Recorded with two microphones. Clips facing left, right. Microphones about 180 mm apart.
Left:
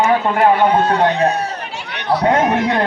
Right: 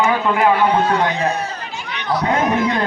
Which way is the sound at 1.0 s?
65° left (ahead or behind).